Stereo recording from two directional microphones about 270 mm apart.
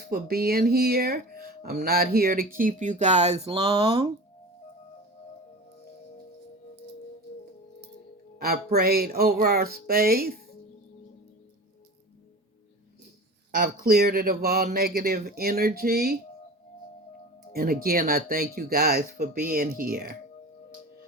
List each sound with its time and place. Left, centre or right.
0.1 s speech: right; by 4.1 s centre
8.4 s speech: right
13.6 s speech: right
17.5 s speech: right